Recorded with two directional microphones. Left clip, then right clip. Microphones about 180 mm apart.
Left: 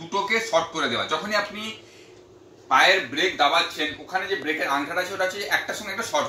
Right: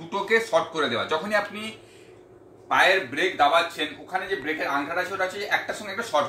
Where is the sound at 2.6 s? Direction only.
15° right (ahead or behind).